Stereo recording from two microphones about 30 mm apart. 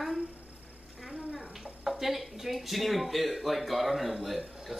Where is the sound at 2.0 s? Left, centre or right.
Centre.